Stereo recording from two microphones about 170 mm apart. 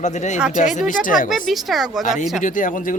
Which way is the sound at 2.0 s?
45° left (ahead or behind).